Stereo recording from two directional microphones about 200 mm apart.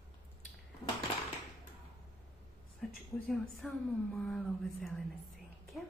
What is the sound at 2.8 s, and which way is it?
A woman's voice, 5° left (ahead or behind).